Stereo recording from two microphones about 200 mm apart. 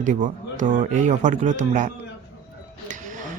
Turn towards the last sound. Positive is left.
turn(degrees=-40)  # may be behind; listen again after turning